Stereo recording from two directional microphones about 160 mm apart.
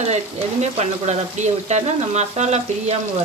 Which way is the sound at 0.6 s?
45° right (ahead or behind).